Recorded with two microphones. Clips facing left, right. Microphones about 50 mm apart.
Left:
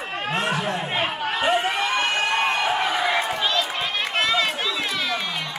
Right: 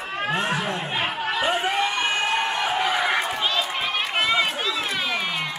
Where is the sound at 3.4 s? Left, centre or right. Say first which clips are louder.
Left 1 dB; centre.